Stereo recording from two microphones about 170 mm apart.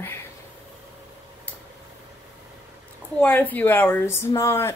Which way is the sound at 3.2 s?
10° left (ahead or behind).